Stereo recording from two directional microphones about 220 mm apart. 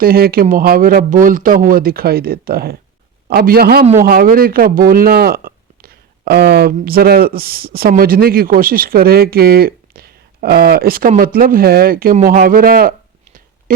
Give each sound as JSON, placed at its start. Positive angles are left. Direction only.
{"t": 0.0, "sound": "speech", "side_deg": -40}